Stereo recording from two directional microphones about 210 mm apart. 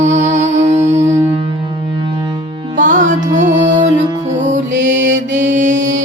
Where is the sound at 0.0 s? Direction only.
35° right (ahead or behind).